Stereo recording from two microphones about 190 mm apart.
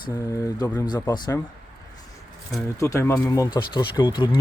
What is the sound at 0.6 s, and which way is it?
Speech, 15° left (ahead or behind).